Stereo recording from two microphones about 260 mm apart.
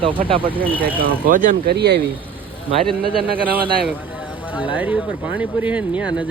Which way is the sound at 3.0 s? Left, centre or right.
Right.